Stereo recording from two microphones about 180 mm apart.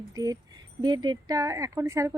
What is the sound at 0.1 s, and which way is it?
Speech, 20° right (ahead or behind).